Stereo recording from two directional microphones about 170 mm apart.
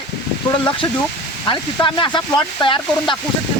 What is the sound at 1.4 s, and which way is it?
Speech, 25° left (ahead or behind).